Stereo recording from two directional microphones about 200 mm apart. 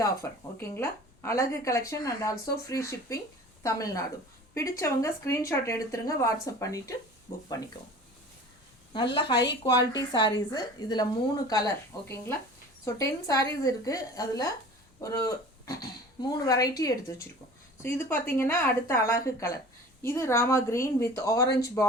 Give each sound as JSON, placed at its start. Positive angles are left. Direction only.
{"t": 0.0, "sound": "a woman's voice", "side_deg": 15}
{"t": 9.1, "sound": "a woman's voice", "side_deg": 25}